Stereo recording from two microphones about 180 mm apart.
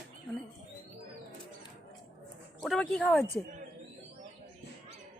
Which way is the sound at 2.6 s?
5° left (ahead or behind).